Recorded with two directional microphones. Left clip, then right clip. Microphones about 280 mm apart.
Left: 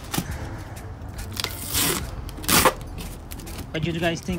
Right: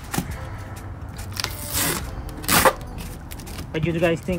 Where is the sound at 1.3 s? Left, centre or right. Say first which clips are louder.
Even; centre.